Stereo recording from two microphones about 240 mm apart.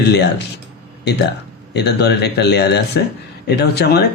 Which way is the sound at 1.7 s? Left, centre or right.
Left.